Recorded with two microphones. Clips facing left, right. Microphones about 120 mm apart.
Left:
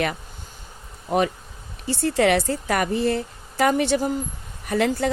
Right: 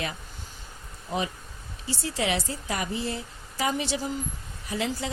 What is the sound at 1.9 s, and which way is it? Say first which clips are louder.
Speech: left 9 dB; 60° left (ahead or behind).